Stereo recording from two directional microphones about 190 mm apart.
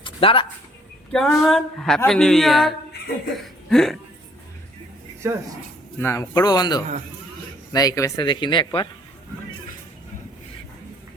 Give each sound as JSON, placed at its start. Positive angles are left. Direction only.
{"t": 0.0, "sound": "a sound", "side_deg": 30}
{"t": 1.1, "sound": "speech", "side_deg": 0}
{"t": 5.2, "sound": "speech", "side_deg": -15}
{"t": 6.0, "sound": "speech", "side_deg": 15}